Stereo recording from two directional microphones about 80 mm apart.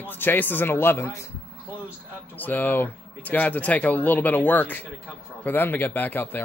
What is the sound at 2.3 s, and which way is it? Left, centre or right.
Speech, left.